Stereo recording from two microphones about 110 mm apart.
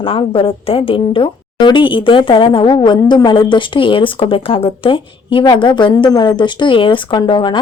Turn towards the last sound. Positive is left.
turn(degrees=45)  # may be behind; listen again after turning